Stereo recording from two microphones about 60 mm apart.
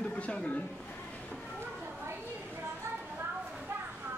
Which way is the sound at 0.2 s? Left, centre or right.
Centre.